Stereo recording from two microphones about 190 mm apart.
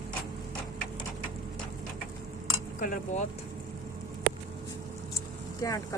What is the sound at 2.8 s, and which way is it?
Speech, 45° left (ahead or behind).